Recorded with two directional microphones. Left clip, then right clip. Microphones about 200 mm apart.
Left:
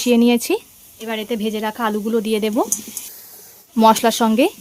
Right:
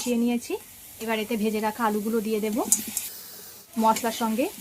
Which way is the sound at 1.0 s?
30° left (ahead or behind).